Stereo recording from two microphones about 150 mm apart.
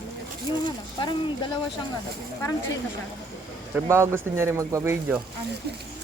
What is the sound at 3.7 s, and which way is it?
Speech, 15° right (ahead or behind).